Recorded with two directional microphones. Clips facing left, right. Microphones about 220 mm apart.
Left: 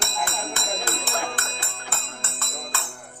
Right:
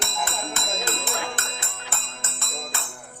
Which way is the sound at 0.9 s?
20° right (ahead or behind).